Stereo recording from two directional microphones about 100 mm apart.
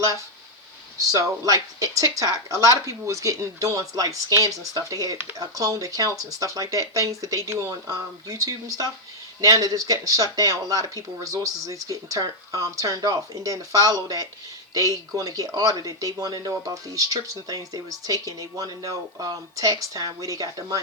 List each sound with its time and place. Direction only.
1.0 s speech: 35° right (ahead or behind)